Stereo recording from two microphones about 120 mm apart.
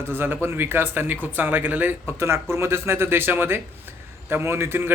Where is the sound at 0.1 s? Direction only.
15° right (ahead or behind).